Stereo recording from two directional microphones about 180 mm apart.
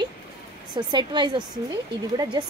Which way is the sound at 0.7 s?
25° right (ahead or behind).